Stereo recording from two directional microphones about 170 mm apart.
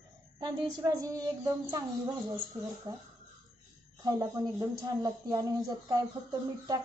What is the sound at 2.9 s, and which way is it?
Speech, 25° right (ahead or behind).